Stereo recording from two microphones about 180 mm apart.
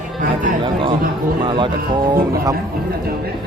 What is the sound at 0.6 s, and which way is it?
Speech, 25° right (ahead or behind).